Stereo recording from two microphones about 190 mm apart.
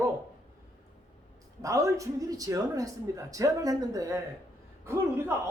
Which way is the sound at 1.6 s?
15° right (ahead or behind).